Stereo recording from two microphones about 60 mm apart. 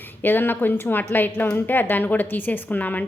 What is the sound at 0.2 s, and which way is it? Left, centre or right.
A woman's voice, left.